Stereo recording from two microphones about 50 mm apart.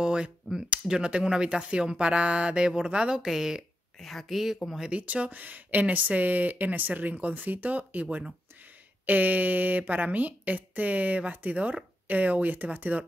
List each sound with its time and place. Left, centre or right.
0.0 s speech: centre
4.0 s speech: centre
4.9 s speech: right